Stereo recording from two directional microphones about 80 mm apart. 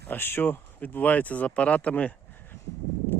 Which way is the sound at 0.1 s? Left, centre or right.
Left.